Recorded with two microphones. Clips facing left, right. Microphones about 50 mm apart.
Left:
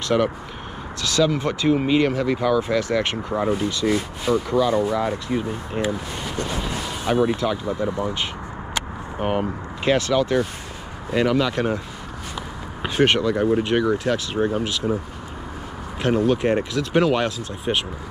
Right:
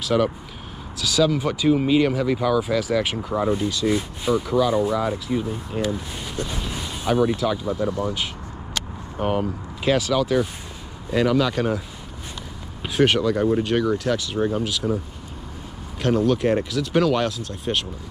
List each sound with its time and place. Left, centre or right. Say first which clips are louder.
0.1 s speech: even; centre
1.0 s speech: even; centre
3.8 s speech: left 1 dB; left
4.5 s speech: even; centre
4.8 s speech: even; centre
5.9 s speech: left 2 dB; left
7.3 s speech: even; centre
8.7 s vehicle: left 1 dB; centre
9.9 s speech: left 2 dB; centre
11.1 s speech: even; centre
12.8 s speech: even; centre
16.0 s speech: even; centre